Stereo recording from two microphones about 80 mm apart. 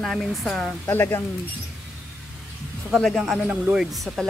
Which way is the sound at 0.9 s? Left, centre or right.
Left.